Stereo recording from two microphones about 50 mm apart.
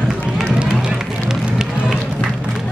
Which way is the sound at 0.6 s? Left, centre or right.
Centre.